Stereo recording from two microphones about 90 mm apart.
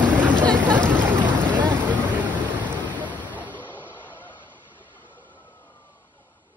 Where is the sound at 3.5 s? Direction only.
20° left (ahead or behind).